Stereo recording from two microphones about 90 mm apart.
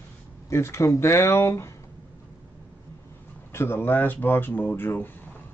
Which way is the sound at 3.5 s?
25° left (ahead or behind).